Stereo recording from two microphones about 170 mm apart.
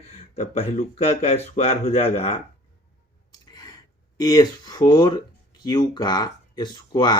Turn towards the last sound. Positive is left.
turn(degrees=25)  # may be behind; listen again after turning